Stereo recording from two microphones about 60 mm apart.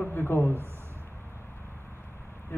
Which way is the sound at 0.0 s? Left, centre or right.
Left.